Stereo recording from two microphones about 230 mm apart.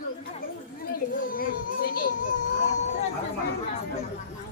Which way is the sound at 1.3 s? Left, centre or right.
Left.